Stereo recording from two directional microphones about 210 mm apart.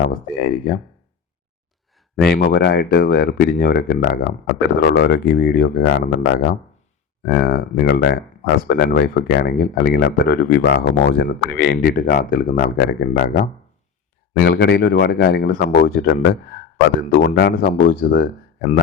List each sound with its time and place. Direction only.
0.0 s speech: 45° left (ahead or behind)
2.2 s speech: 50° left (ahead or behind)
16.7 s speech: 40° left (ahead or behind)